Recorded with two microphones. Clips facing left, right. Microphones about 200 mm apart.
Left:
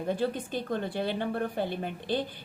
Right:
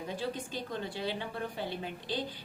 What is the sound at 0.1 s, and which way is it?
A woman's voice, 55° left (ahead or behind).